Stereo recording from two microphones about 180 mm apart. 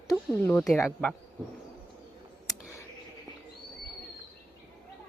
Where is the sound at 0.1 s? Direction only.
10° left (ahead or behind).